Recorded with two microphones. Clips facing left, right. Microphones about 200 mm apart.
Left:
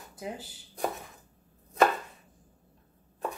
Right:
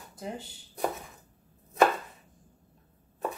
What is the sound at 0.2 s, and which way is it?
Speech, 5° left (ahead or behind).